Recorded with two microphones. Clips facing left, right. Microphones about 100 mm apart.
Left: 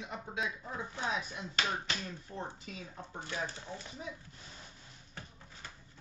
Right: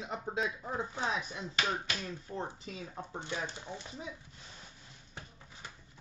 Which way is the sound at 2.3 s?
15° right (ahead or behind).